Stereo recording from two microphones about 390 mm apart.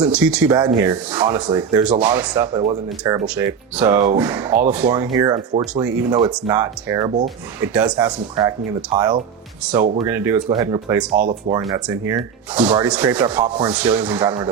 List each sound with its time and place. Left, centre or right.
0.0 s speech: centre
10.1 s speech: centre